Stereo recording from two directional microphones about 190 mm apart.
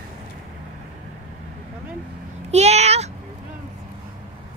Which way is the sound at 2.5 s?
35° right (ahead or behind).